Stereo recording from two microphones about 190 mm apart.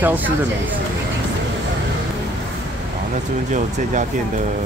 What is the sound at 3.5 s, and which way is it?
Speech, 40° right (ahead or behind).